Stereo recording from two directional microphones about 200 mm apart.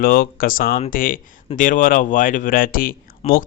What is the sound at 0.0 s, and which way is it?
Speech, 45° left (ahead or behind).